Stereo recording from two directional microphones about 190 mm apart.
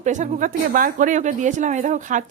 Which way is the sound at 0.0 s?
40° right (ahead or behind).